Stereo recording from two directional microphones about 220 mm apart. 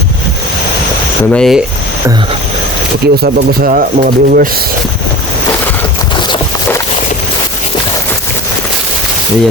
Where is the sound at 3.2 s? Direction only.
40° right (ahead or behind).